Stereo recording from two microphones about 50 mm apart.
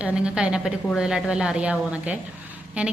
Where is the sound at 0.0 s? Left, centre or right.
Right.